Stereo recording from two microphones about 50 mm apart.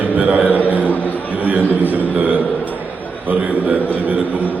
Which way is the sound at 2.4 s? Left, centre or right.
Left.